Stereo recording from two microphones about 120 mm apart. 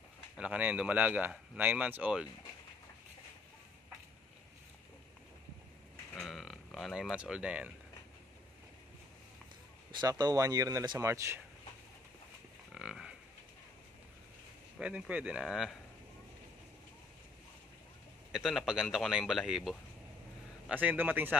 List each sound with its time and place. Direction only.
0.4 s speech: 10° right (ahead or behind)
6.1 s speech: centre (ahead or behind)
9.8 s speech: 35° right (ahead or behind)
12.7 s livestock: 5° right (ahead or behind)
14.8 s speech: 10° right (ahead or behind)
18.3 s speech: centre (ahead or behind)
20.6 s speech: 15° right (ahead or behind)